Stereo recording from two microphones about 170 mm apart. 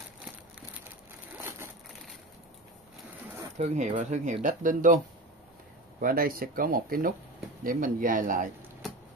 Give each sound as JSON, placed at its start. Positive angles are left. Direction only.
{"t": 3.5, "sound": "speech", "side_deg": -45}